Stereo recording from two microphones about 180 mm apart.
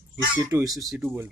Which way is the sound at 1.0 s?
10° right (ahead or behind).